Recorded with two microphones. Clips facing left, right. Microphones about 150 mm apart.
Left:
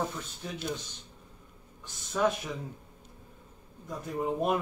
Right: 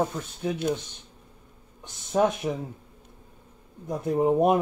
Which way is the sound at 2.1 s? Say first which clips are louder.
Right 5 dB; 45° right (ahead or behind).